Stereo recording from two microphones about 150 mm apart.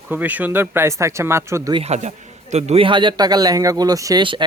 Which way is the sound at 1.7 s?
45° right (ahead or behind).